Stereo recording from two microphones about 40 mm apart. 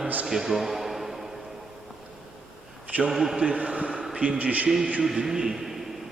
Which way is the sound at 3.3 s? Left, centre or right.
Right.